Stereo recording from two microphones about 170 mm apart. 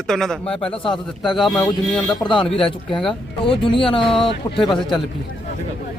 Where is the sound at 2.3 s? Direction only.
30° left (ahead or behind).